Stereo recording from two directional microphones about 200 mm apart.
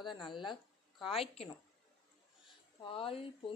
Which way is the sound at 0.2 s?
25° left (ahead or behind).